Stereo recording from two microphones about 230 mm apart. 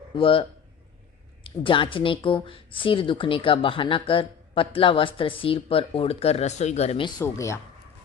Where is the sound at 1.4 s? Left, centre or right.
Left.